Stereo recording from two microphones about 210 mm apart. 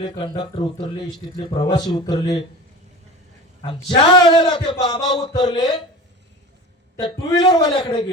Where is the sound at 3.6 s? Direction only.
25° left (ahead or behind).